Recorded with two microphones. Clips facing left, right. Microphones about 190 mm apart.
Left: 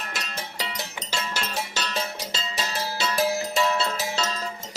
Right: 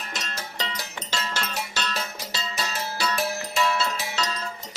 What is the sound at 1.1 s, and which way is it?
Music, 10° left (ahead or behind).